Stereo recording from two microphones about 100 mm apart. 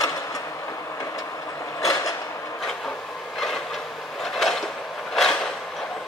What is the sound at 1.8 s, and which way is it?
Mechanisms, 35° left (ahead or behind).